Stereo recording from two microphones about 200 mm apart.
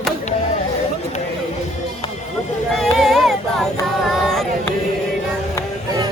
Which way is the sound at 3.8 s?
Centre (ahead or behind).